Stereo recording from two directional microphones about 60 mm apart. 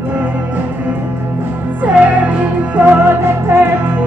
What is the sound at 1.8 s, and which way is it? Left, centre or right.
Music, right.